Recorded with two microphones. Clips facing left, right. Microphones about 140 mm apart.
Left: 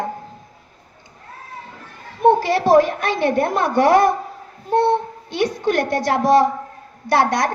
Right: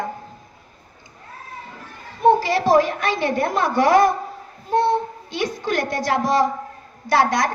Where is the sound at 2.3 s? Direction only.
60° left (ahead or behind).